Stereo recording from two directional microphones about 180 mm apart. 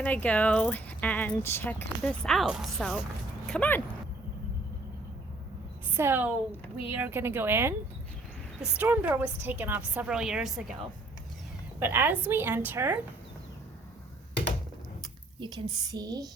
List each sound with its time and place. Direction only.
0.0 s speech: 10° left (ahead or behind)
6.0 s a woman's voice: 10° right (ahead or behind)
11.8 s a woman's voice: 10° right (ahead or behind)
15.0 s a sound: 25° right (ahead or behind)
15.8 s speech: 20° right (ahead or behind)